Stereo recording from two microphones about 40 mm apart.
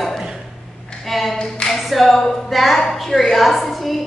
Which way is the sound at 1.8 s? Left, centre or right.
Centre.